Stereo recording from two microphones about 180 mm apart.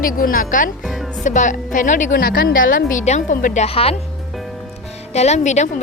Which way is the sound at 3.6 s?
35° left (ahead or behind).